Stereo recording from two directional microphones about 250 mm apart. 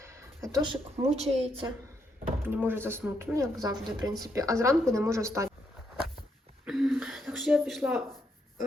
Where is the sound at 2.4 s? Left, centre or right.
Centre.